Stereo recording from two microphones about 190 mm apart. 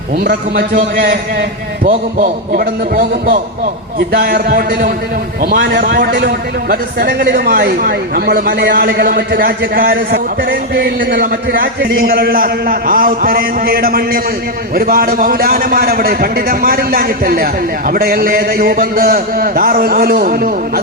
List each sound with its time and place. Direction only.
0.3 s a man's voice: 50° right (ahead or behind)